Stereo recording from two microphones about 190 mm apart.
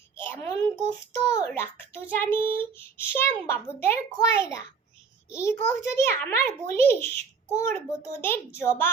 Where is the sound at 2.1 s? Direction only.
10° left (ahead or behind).